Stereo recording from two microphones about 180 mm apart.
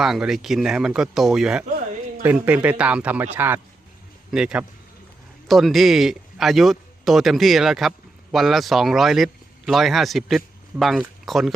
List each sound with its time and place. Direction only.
0.0 s speech: centre (ahead or behind)
1.6 s a sound: 50° right (ahead or behind)
2.2 s speech: 10° right (ahead or behind)